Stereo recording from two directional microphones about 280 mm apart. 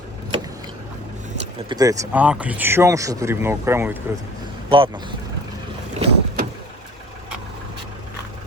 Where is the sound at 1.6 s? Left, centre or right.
Centre.